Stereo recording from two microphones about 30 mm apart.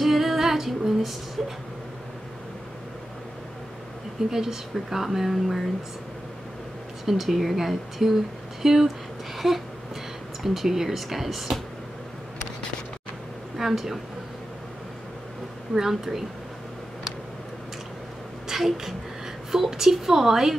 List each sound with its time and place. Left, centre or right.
0.0 s female singing: centre
4.3 s speech: centre
7.1 s speech: centre
13.6 s speech: centre
15.7 s speech: centre
18.5 s speech: centre